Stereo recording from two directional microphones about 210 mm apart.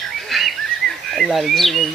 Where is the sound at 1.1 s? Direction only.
Centre (ahead or behind).